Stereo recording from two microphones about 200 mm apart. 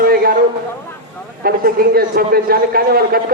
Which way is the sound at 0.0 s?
50° right (ahead or behind).